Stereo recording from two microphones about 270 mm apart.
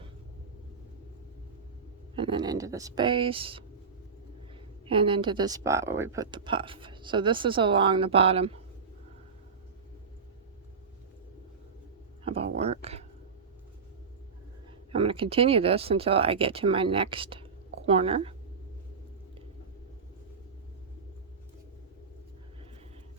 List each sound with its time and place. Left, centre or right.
2.1 s speech: centre
4.9 s speech: centre
12.2 s a sound: right
14.9 s speech: centre